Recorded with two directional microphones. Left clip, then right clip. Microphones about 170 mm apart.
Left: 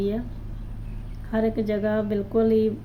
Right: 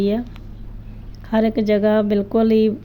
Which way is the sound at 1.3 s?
35° right (ahead or behind).